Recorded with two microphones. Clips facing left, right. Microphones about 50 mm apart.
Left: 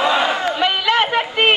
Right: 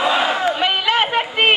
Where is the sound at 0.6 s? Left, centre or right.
Centre.